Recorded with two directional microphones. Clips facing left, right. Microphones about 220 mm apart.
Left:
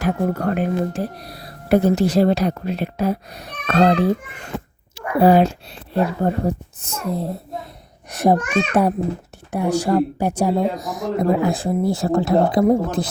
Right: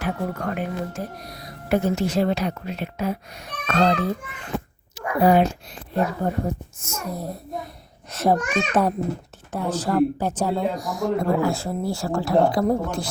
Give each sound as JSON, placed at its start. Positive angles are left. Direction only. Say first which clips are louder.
{"t": 0.0, "sound": "speech", "louder": "left 6 dB", "side_deg": 40}
{"t": 5.2, "sound": "speech", "louder": "left 4 dB", "side_deg": 30}
{"t": 8.1, "sound": "a child's voice", "louder": "left 4 dB", "side_deg": 15}